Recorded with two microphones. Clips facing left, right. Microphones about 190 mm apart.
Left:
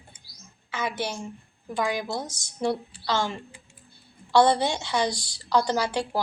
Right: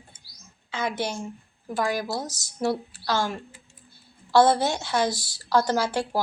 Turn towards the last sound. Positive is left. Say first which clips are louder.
# right 1 dB
turn(degrees=-10)  # may be behind; listen again after turning